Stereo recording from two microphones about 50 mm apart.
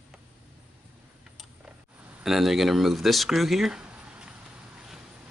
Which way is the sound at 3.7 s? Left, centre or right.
Centre.